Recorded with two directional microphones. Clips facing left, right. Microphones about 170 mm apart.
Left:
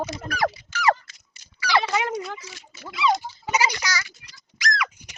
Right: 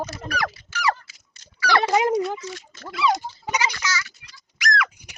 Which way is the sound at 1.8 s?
35° right (ahead or behind).